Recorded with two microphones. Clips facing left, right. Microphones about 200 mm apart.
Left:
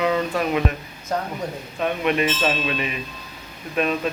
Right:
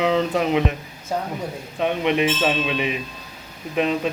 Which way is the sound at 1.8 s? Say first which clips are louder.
Right 1 dB; 20° right (ahead or behind).